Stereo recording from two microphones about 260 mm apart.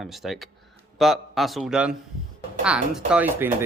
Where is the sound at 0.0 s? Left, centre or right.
Centre.